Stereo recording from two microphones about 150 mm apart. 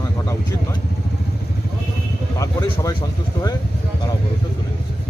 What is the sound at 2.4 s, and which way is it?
Speech, 25° left (ahead or behind).